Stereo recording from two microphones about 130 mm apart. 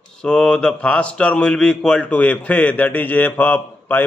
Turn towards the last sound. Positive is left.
turn(degrees=15)  # may be behind; listen again after turning